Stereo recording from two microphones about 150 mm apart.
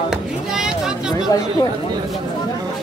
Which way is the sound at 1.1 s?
25° left (ahead or behind).